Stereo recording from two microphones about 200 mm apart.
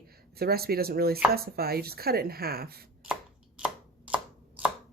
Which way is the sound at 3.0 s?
5° right (ahead or behind).